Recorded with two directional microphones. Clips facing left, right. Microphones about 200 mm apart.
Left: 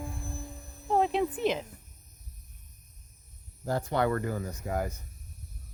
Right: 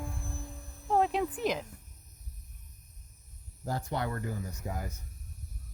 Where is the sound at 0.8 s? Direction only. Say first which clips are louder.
Left 2 dB; 5° left (ahead or behind).